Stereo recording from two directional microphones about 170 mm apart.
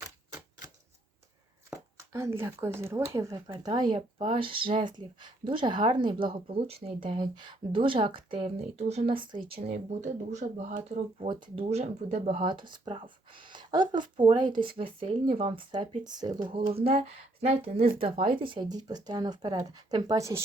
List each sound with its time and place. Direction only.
1.7 s speech: 15° right (ahead or behind)
9.6 s speech: 45° right (ahead or behind)
11.3 s speech: 30° right (ahead or behind)